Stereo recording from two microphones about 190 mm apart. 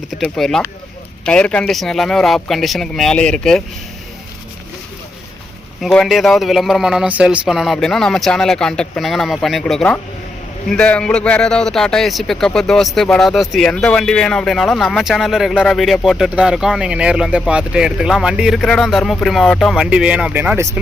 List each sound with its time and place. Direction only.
0.2 s a man's voice: centre (ahead or behind)
5.8 s a man's voice: centre (ahead or behind)